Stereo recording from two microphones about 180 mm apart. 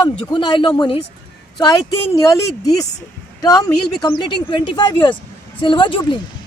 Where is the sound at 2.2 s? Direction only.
15° left (ahead or behind).